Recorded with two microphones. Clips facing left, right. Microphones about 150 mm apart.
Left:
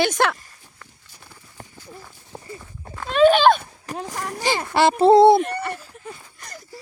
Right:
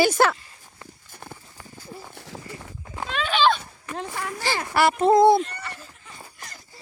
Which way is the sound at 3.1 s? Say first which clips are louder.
Left 8 dB; 45° left (ahead or behind).